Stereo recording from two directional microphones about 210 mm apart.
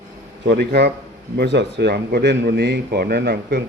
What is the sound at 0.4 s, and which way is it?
Speech, 50° right (ahead or behind).